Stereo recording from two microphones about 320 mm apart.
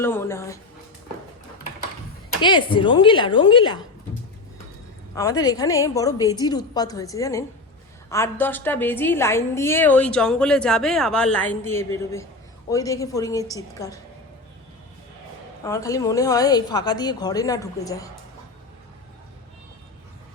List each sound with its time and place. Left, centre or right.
0.0 s a woman's voice: centre
2.4 s a woman's voice: centre
5.1 s a woman's voice: centre
15.6 s a woman's voice: centre